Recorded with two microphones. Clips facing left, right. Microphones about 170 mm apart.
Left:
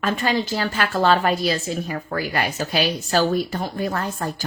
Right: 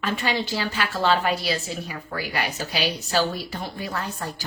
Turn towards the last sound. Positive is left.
turn(degrees=50)  # may be behind; listen again after turning